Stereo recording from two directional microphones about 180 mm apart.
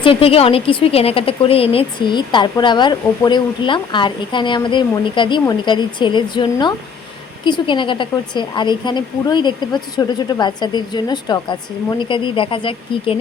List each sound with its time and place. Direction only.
0.0 s speech: 30° left (ahead or behind)